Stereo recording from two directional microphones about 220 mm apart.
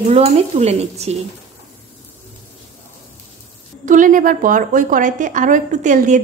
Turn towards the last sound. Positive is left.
turn(degrees=-35)  # may be behind; listen again after turning